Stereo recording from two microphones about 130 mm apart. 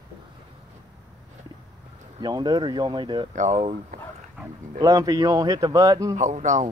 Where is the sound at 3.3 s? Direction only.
70° right (ahead or behind).